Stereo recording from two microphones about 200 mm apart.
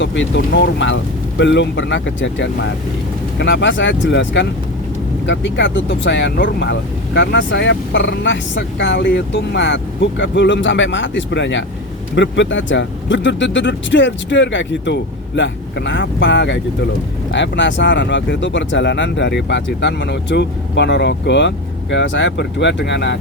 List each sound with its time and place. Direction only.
0.0 s speech: 65° left (ahead or behind)